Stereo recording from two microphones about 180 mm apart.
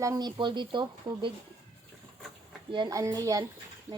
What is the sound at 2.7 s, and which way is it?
Speech, 20° right (ahead or behind).